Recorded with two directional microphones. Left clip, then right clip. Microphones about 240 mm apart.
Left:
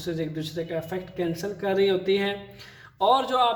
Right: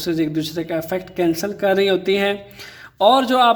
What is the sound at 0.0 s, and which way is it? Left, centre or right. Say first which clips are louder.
Speech: right 9 dB; right.